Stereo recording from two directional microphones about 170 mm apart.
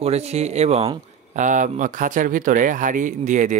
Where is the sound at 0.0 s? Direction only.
40° right (ahead or behind).